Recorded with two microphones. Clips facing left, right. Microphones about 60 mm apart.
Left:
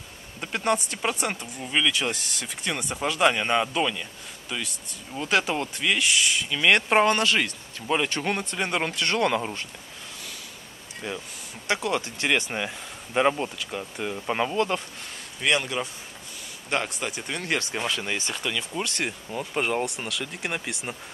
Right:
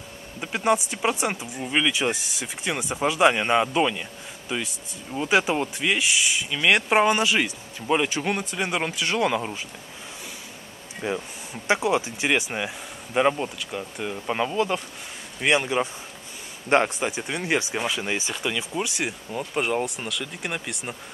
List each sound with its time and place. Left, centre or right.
0.4 s speech: centre
11.0 s speech: centre
15.4 s speech: centre
16.6 s a man's voice: right
17.0 s speech: centre